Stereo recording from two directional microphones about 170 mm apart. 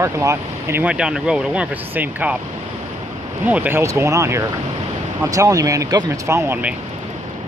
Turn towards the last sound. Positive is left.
turn(degrees=-15)  # may be behind; listen again after turning